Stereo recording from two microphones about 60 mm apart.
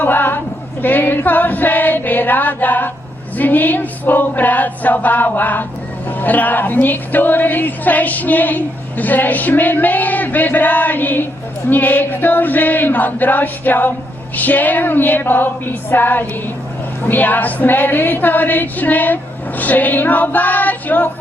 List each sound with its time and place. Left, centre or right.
0.0 s choir: left
3.3 s speech: left
11.7 s female singing: left